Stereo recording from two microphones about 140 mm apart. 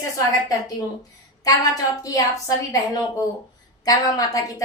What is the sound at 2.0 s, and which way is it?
Speech, 25° left (ahead or behind).